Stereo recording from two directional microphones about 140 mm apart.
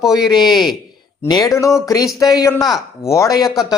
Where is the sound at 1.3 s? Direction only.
25° left (ahead or behind).